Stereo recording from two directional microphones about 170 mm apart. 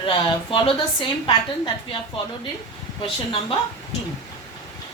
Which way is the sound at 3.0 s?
30° left (ahead or behind).